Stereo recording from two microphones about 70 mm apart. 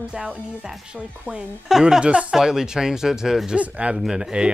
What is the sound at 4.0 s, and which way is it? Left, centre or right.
Speech, centre.